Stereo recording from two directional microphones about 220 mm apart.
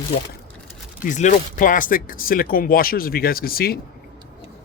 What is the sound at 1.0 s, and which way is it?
Speech, 35° left (ahead or behind).